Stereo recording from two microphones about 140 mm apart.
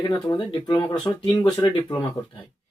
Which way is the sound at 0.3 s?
30° left (ahead or behind).